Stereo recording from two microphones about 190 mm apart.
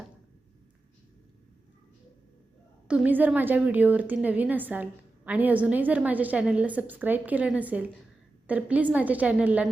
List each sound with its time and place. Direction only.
2.8 s a woman's voice: 5° right (ahead or behind)